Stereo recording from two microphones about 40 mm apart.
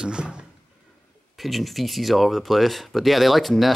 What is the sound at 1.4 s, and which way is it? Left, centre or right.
Speech, centre.